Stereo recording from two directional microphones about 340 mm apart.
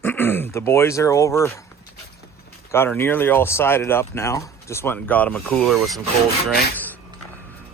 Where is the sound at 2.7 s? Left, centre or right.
Centre.